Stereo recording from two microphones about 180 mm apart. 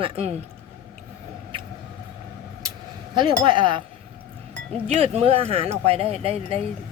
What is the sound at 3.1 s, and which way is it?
Speech, 25° right (ahead or behind).